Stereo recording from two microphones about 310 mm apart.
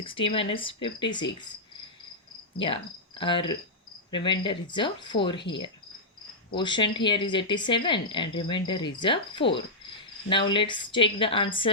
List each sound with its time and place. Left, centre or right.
0.0 s speech: centre
3.2 s speech: centre
6.5 s speech: centre